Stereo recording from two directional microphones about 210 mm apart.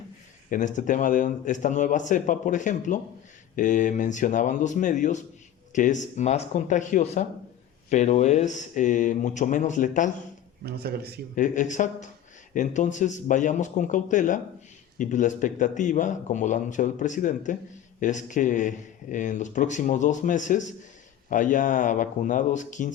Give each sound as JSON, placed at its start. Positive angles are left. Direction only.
{"t": 0.5, "sound": "a man's voice", "side_deg": 35}
{"t": 10.6, "sound": "a man's voice", "side_deg": -50}
{"t": 11.3, "sound": "a man's voice", "side_deg": 35}